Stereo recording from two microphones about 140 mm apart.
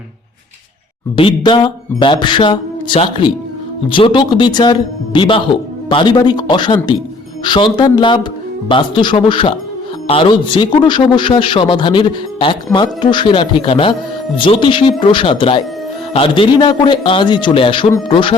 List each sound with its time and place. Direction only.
1.1 s a man's voice: 35° left (ahead or behind)